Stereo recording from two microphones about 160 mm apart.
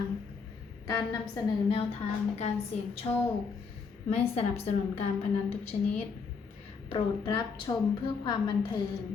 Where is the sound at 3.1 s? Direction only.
25° left (ahead or behind).